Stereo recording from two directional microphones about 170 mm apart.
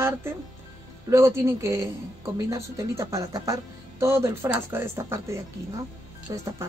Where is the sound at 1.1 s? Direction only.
15° right (ahead or behind).